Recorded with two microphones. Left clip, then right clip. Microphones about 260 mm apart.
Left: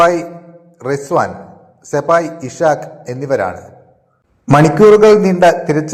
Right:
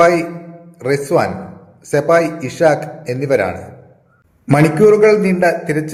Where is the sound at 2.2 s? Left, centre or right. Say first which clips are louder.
Even; centre.